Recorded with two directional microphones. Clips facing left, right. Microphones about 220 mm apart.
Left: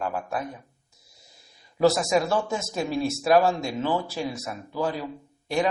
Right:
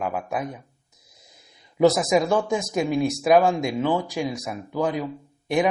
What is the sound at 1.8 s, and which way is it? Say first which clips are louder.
Speech: right 3 dB; 20° right (ahead or behind).